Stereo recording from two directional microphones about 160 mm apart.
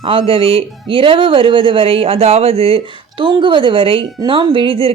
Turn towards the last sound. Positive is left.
turn(degrees=-35)  # may be behind; listen again after turning